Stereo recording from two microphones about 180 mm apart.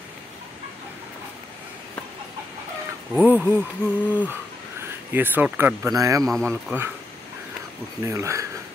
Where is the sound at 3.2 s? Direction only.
10° right (ahead or behind).